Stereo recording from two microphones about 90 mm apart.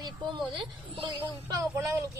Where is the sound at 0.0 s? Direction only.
55° right (ahead or behind).